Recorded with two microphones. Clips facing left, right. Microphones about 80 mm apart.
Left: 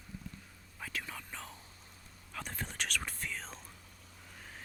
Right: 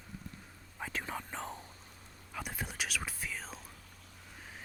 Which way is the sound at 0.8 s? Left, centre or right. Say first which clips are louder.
Right 4 dB; right.